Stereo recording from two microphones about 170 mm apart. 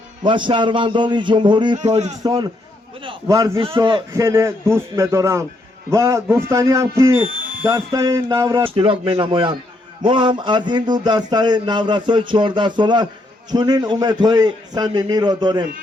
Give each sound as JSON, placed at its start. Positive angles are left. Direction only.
{"t": 0.2, "sound": "speech", "side_deg": -30}
{"t": 1.8, "sound": "speech", "side_deg": -40}
{"t": 2.2, "sound": "speech", "side_deg": -25}
{"t": 4.1, "sound": "a man's voice", "side_deg": -15}
{"t": 8.7, "sound": "speech", "side_deg": -30}